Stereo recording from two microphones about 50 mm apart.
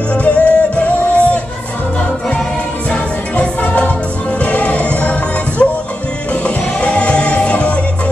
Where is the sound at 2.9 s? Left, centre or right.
Left.